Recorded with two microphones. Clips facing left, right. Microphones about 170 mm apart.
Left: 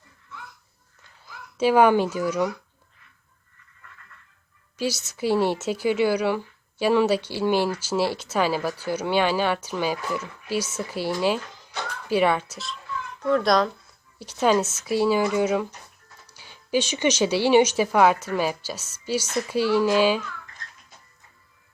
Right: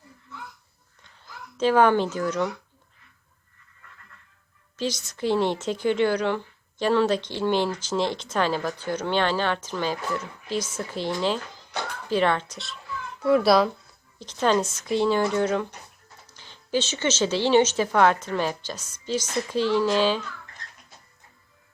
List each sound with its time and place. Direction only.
1.5 s a woman's voice: 10° left (ahead or behind)
4.8 s a woman's voice: 5° left (ahead or behind)
13.2 s speech: 5° right (ahead or behind)
14.2 s a woman's voice: 10° left (ahead or behind)